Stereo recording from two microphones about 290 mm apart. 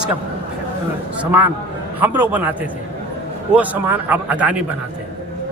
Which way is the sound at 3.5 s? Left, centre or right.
Centre.